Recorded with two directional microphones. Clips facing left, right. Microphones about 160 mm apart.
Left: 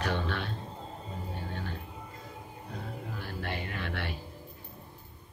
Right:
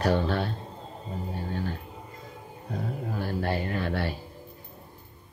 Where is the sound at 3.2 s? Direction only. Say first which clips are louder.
Right 9 dB; 40° right (ahead or behind).